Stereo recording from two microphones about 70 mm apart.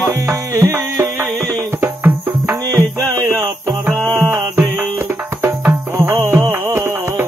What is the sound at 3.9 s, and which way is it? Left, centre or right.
Music, left.